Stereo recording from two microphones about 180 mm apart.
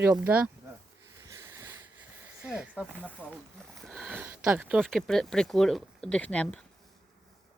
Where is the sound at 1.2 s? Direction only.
15° right (ahead or behind).